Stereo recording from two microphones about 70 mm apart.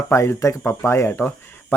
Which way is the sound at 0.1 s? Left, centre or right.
Left.